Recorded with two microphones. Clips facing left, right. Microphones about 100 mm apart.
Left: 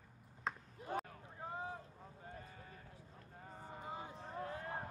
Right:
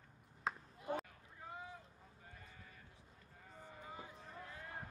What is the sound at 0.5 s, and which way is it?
Basketball bounce, 5° right (ahead or behind).